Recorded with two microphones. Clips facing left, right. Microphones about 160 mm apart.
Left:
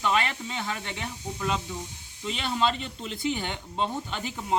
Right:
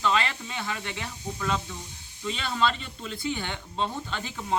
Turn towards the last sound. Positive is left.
turn(degrees=15)  # may be behind; listen again after turning